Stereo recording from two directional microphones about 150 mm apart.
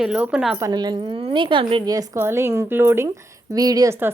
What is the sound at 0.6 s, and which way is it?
A woman's voice, 25° right (ahead or behind).